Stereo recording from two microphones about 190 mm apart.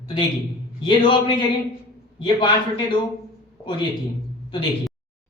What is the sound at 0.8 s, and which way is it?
A man's voice, 25° left (ahead or behind).